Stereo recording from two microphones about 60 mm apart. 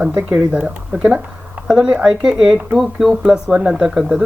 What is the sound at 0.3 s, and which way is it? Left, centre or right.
Speech, centre.